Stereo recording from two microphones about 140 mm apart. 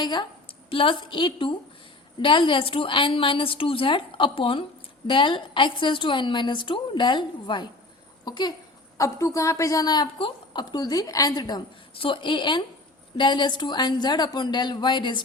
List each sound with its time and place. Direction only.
0.0 s a woman's voice: 30° left (ahead or behind)